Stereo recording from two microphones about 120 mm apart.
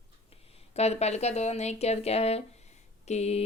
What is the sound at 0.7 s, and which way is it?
Speech, 60° left (ahead or behind).